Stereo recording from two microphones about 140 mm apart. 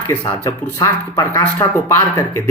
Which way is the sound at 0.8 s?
15° left (ahead or behind).